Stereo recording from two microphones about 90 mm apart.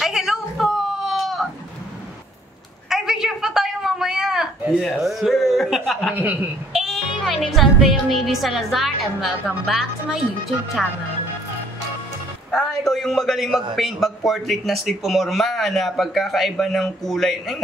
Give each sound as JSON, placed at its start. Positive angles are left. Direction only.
{"t": 0.0, "sound": "a sound", "side_deg": -5}
{"t": 2.9, "sound": "a sound", "side_deg": -5}
{"t": 5.9, "sound": "chuckle", "side_deg": 0}
{"t": 6.1, "sound": "a woman's voice", "side_deg": -20}
{"t": 6.7, "sound": "speech", "side_deg": 0}
{"t": 12.5, "sound": "a man's voice", "side_deg": 0}